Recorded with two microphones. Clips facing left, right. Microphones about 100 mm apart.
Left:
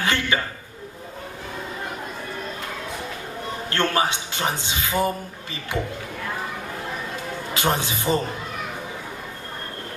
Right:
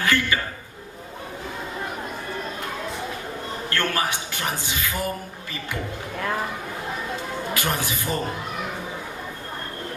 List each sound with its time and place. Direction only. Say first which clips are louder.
0.0 s a man's voice: right 1 dB; 20° left (ahead or behind)
3.7 s a man's voice: left 3 dB; 25° left (ahead or behind)
7.5 s a man's voice: left 5 dB; 20° left (ahead or behind)